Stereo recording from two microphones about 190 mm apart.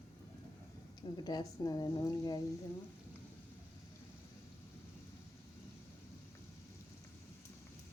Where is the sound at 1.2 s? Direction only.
20° left (ahead or behind).